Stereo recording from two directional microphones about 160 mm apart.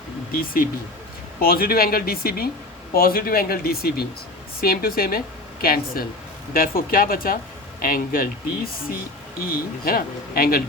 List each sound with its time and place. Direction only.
0.3 s speech: 65° left (ahead or behind)